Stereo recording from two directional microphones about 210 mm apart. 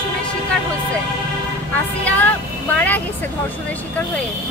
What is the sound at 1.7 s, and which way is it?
Speech, 5° left (ahead or behind).